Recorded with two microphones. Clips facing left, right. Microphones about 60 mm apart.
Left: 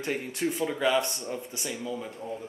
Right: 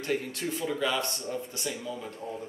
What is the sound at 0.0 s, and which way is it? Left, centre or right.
Speech, centre.